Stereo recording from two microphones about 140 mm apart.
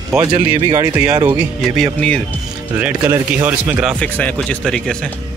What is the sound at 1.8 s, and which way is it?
Speech, 10° left (ahead or behind).